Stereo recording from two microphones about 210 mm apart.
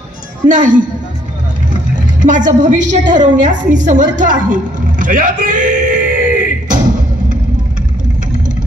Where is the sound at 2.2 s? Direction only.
20° right (ahead or behind).